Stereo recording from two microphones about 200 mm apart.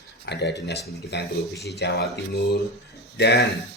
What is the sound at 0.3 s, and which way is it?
Speech, 60° left (ahead or behind).